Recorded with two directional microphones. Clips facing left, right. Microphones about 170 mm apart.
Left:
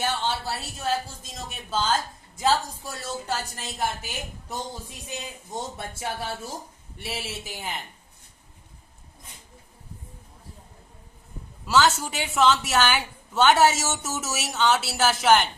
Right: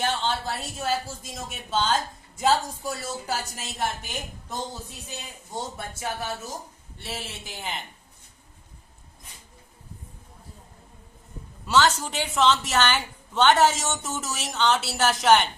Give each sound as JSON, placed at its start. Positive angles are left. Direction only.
{"t": 0.0, "sound": "a sound", "side_deg": 10}
{"t": 1.5, "sound": "speech", "side_deg": 0}
{"t": 5.7, "sound": "speech", "side_deg": 30}
{"t": 7.0, "sound": "speech", "side_deg": 10}
{"t": 11.6, "sound": "speech", "side_deg": 0}